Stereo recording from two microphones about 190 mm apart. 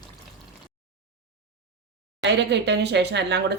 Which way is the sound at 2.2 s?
65° right (ahead or behind).